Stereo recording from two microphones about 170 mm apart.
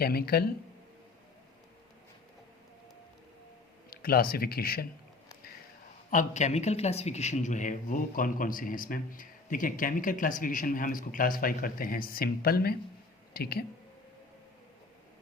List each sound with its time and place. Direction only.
0.0 s a man's voice: 65° left (ahead or behind)
3.8 s speech: 60° left (ahead or behind)
6.1 s a man's voice: 45° left (ahead or behind); by 13.7 s 65° left (ahead or behind)